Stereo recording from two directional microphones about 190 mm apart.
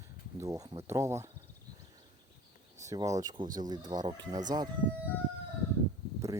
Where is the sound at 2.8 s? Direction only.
15° right (ahead or behind).